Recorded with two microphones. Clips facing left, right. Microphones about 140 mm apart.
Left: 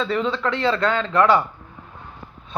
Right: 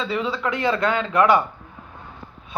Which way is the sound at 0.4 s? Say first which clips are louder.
Right 1 dB; 15° right (ahead or behind).